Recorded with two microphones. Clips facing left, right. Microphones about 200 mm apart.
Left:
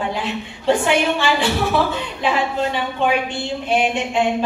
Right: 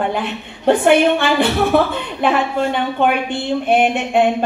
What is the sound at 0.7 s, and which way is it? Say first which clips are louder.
A woman's voice: right 5 dB; 55° right (ahead or behind).